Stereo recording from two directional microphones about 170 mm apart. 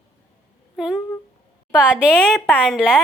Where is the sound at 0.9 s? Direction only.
15° left (ahead or behind).